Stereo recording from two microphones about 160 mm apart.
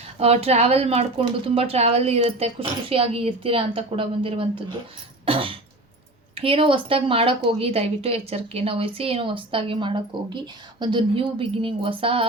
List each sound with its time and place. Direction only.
0.2 s speech: 40° right (ahead or behind)
5.2 s cough: 35° right (ahead or behind)
6.3 s speech: 35° right (ahead or behind)